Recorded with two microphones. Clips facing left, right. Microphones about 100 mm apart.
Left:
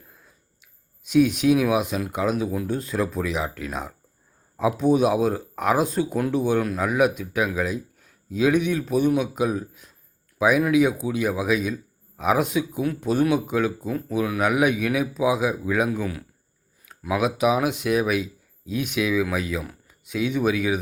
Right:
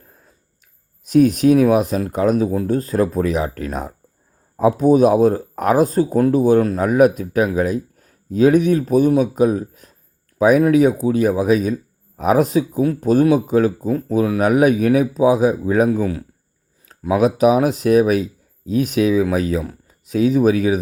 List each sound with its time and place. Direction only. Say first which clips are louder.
0.1 s speech: right 2 dB; 45° right (ahead or behind)